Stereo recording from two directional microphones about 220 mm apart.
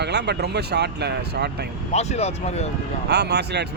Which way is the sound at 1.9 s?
30° left (ahead or behind).